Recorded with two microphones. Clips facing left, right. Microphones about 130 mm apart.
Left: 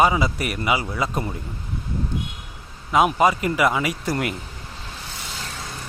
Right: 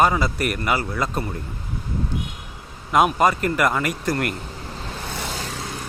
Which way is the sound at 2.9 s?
Centre (ahead or behind).